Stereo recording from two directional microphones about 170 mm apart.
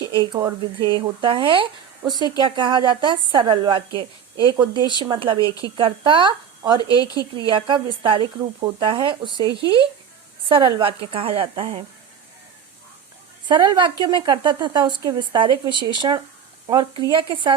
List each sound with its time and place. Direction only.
0.0 s speech: 25° right (ahead or behind)
6.8 s speech: 20° left (ahead or behind)
7.3 s speech: 30° right (ahead or behind)
10.5 s a woman's voice: 30° right (ahead or behind)
13.5 s speech: 25° right (ahead or behind)